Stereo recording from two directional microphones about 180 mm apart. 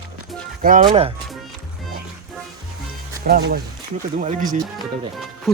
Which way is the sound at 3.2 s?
55° right (ahead or behind).